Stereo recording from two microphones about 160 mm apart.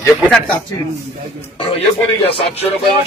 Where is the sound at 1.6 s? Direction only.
35° left (ahead or behind).